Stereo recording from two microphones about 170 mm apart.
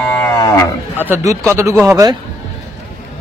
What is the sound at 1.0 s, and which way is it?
A man's voice, 15° right (ahead or behind).